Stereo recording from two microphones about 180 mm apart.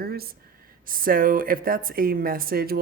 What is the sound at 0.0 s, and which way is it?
Speech, 60° right (ahead or behind).